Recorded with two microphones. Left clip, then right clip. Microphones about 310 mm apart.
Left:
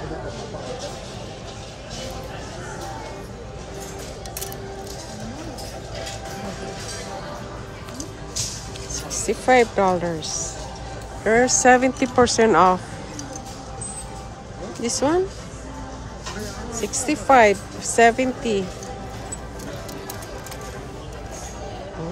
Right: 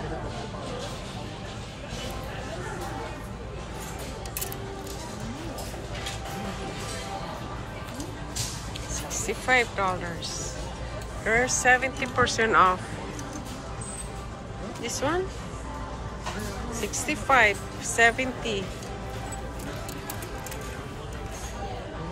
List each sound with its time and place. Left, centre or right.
8.9 s speech: centre
14.8 s speech: centre
16.7 s speech: centre